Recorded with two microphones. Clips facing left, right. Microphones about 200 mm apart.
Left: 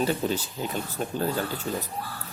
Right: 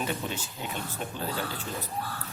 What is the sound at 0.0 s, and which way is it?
Speech, 35° left (ahead or behind).